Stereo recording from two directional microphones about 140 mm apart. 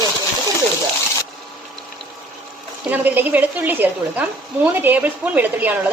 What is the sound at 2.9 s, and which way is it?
A woman's voice, 10° right (ahead or behind).